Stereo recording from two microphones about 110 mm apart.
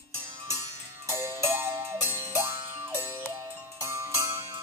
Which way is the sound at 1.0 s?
25° right (ahead or behind).